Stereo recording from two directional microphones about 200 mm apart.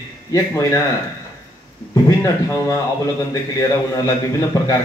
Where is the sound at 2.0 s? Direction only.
15° left (ahead or behind).